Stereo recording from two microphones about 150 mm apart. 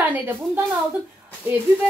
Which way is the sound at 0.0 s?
10° right (ahead or behind).